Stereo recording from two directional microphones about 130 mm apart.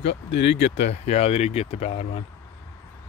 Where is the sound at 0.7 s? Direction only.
55° left (ahead or behind).